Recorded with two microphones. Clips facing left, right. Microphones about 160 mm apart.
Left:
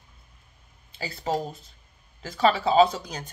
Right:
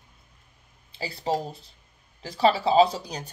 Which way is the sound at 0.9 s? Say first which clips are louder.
Right 1 dB; 35° right (ahead or behind).